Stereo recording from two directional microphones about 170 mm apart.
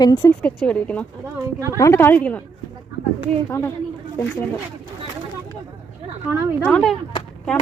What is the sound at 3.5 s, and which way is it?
Speech, 15° left (ahead or behind).